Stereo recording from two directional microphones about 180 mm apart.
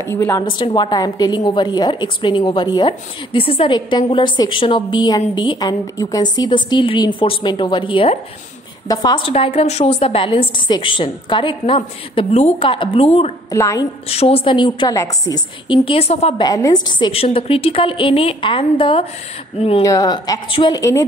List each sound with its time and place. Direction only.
0.0 s a woman's voice: 15° left (ahead or behind); by 13.3 s 35° left (ahead or behind)
13.5 s a woman's voice: 20° left (ahead or behind)
14.0 s a woman's voice: 35° left (ahead or behind)
16.4 s a woman's voice: 20° left (ahead or behind)
19.8 s a woman's voice: 20° left (ahead or behind)